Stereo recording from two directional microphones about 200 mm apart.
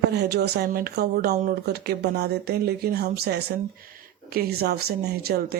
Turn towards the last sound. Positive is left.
turn(degrees=-50)  # may be behind; listen again after turning